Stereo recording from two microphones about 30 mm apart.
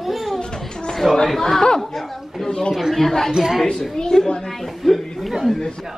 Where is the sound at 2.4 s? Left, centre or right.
Left.